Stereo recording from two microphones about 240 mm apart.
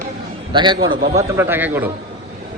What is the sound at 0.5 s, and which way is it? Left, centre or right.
Speech, centre.